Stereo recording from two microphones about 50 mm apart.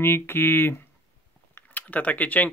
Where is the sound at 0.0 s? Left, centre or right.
Left.